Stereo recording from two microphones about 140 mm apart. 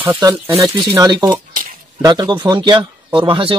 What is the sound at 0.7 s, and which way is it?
A man's voice, 30° right (ahead or behind).